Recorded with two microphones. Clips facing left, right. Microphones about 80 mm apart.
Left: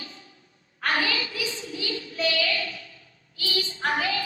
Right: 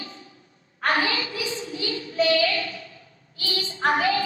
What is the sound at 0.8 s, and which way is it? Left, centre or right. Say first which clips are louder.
Child singing: right 3 dB; right.